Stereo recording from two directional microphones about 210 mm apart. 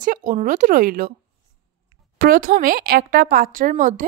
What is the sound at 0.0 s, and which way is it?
A woman's voice, 40° right (ahead or behind).